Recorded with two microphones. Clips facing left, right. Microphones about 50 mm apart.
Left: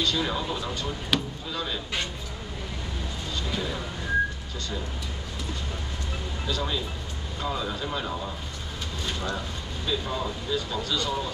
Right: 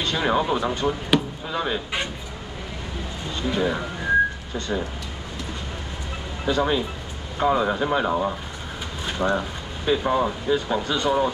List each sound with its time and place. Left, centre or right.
0.0 s speech: right
3.3 s speech: right
6.4 s speech: right